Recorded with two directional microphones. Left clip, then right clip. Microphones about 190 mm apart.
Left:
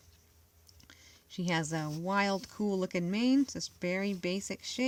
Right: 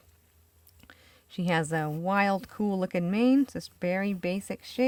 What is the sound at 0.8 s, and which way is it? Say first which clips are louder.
Speech: right 3 dB; 40° right (ahead or behind).